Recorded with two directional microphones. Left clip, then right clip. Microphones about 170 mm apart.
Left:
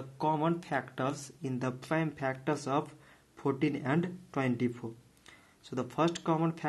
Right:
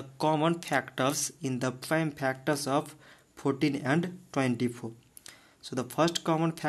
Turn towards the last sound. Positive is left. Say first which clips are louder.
# right 3 dB
turn(degrees=-25)  # may be behind; listen again after turning